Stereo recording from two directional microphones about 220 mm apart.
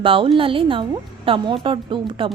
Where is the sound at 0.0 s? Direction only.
25° right (ahead or behind).